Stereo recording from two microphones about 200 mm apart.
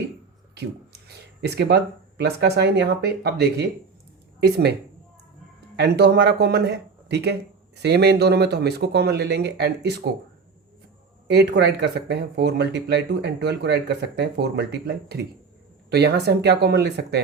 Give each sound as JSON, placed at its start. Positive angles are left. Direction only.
{"t": 0.5, "sound": "speech", "side_deg": -55}
{"t": 5.7, "sound": "speech", "side_deg": -55}
{"t": 11.3, "sound": "speech", "side_deg": -60}